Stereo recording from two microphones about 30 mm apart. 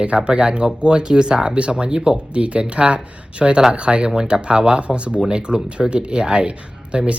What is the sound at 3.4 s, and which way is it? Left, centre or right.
Speech, right.